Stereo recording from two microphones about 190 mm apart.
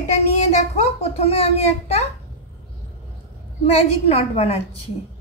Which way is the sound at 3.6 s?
35° left (ahead or behind).